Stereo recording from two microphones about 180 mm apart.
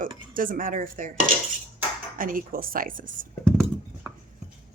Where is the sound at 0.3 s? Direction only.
50° right (ahead or behind).